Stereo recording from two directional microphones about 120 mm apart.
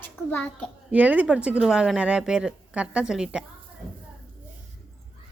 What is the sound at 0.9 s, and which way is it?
Speech, 10° right (ahead or behind).